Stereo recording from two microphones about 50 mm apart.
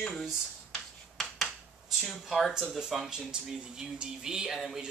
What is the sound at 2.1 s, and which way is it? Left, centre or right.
Speech, centre.